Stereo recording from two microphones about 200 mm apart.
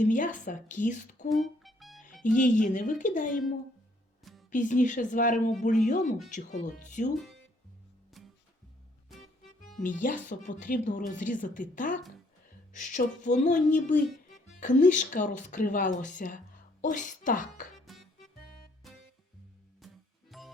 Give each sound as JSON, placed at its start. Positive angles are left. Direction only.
{"t": 0.0, "sound": "speech", "side_deg": 40}
{"t": 1.3, "sound": "music", "side_deg": 0}
{"t": 2.2, "sound": "speech", "side_deg": 40}
{"t": 4.2, "sound": "music", "side_deg": 0}
{"t": 4.5, "sound": "speech", "side_deg": 40}
{"t": 9.6, "sound": "music", "side_deg": 40}
{"t": 10.2, "sound": "speech", "side_deg": 40}
{"t": 17.8, "sound": "music", "side_deg": 0}